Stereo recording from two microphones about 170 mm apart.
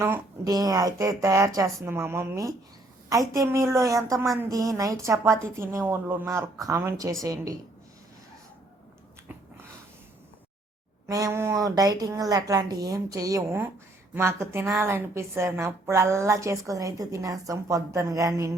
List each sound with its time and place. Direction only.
0.0 s a woman's voice: 20° right (ahead or behind)
11.0 s a woman's voice: 20° right (ahead or behind)